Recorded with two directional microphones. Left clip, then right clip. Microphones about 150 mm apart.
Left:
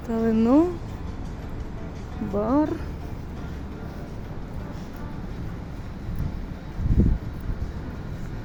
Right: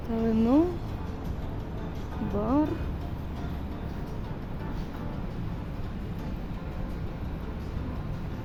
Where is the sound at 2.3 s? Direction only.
20° left (ahead or behind).